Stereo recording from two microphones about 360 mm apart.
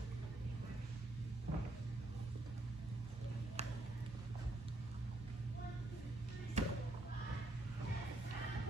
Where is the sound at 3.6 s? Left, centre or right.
Centre.